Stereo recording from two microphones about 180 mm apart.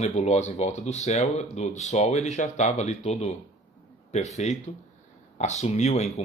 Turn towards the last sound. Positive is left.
turn(degrees=40)  # may be behind; listen again after turning